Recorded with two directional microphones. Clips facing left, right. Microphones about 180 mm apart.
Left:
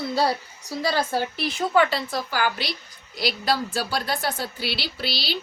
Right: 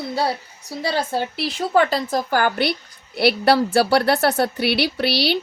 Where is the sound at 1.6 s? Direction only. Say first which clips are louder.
Right 3 dB; 40° right (ahead or behind).